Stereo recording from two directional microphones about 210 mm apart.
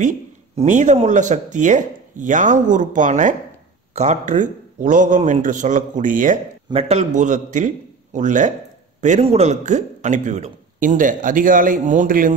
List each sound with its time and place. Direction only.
0.6 s speech: 35° right (ahead or behind)
6.7 s speech: 30° right (ahead or behind)